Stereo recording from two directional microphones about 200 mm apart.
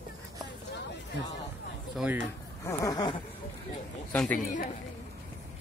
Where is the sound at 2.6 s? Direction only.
15° left (ahead or behind).